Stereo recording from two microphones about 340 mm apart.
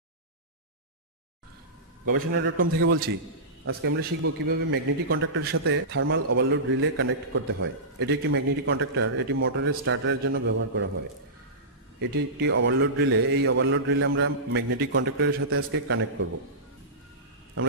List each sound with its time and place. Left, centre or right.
2.1 s a man's voice: right
12.0 s a man's voice: right